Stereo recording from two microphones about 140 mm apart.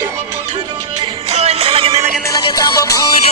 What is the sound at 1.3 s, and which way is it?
Music, 50° right (ahead or behind).